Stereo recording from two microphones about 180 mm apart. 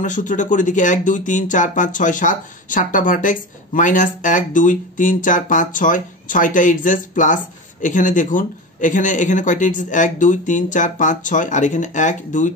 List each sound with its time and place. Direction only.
0.0 s speech: 45° left (ahead or behind)